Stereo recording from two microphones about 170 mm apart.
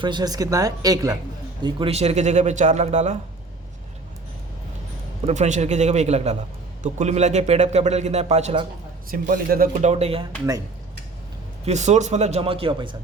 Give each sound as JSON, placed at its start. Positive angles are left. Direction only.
{"t": 0.0, "sound": "speech", "side_deg": -25}
{"t": 1.6, "sound": "a man's voice", "side_deg": -35}
{"t": 5.2, "sound": "a man's voice", "side_deg": -45}
{"t": 9.0, "sound": "speech", "side_deg": -55}
{"t": 11.6, "sound": "a man's voice", "side_deg": -40}